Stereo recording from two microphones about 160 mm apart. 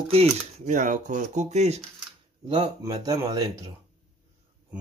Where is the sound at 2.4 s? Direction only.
30° right (ahead or behind).